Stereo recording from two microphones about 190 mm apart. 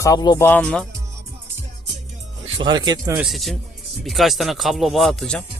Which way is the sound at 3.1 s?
Centre (ahead or behind).